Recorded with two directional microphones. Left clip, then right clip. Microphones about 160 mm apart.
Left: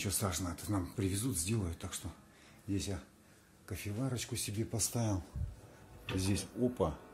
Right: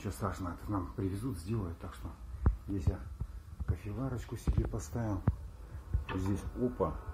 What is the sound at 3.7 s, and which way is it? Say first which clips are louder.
Speech: even; 30° left (ahead or behind).